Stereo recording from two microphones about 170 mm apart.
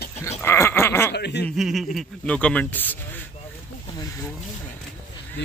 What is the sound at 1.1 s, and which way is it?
Speech, 80° left.